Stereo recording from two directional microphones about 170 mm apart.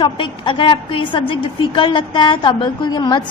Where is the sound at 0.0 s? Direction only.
30° left (ahead or behind).